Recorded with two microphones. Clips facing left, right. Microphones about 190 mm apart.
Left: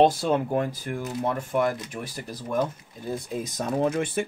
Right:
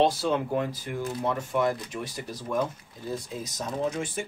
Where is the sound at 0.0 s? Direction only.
50° left (ahead or behind).